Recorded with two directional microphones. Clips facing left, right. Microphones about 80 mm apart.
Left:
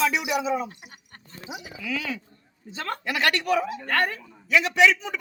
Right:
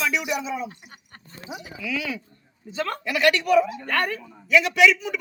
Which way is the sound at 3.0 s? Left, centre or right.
Left.